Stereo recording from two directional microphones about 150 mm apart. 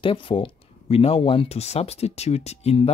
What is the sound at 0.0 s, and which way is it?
Speech, 35° left (ahead or behind).